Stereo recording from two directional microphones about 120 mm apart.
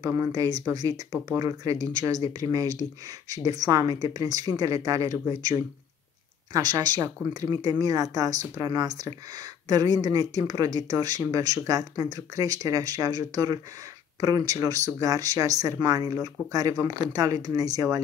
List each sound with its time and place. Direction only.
0.0 s speech: 30° right (ahead or behind)